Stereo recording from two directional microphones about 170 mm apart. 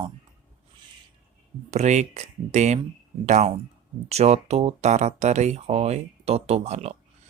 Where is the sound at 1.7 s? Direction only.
40° right (ahead or behind).